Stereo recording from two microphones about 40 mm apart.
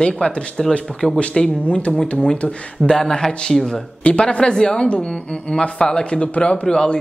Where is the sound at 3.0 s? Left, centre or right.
Centre.